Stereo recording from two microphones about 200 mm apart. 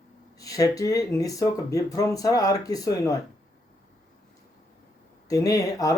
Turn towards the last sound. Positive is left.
turn(degrees=15)  # may be behind; listen again after turning